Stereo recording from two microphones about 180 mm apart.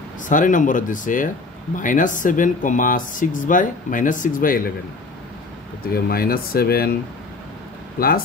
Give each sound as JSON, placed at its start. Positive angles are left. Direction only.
{"t": 0.2, "sound": "speech", "side_deg": 45}
{"t": 5.9, "sound": "speech", "side_deg": 55}
{"t": 8.0, "sound": "speech", "side_deg": 55}